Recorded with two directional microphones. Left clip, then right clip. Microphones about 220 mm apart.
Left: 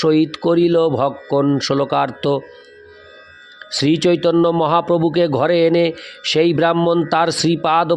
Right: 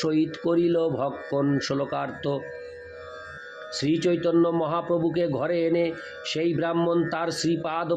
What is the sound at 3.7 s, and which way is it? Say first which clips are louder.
A man's voice: left 9 dB; 45° left (ahead or behind).